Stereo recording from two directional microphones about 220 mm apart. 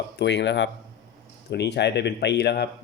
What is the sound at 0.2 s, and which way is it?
Speech, 50° left (ahead or behind).